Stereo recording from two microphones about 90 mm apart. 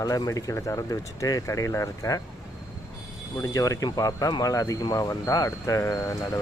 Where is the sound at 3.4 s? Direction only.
40° left (ahead or behind).